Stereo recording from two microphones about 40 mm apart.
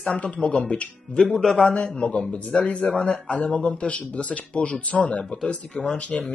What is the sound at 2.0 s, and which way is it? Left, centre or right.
Speech, left.